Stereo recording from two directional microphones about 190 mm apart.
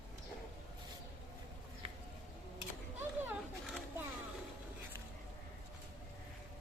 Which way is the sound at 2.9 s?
10° right (ahead or behind).